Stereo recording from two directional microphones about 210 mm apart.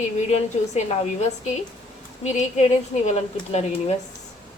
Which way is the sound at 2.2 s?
30° left (ahead or behind).